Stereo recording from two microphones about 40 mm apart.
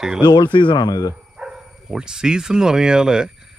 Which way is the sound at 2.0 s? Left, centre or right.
Centre.